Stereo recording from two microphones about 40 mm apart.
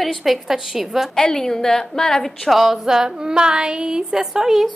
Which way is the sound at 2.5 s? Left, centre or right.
Centre.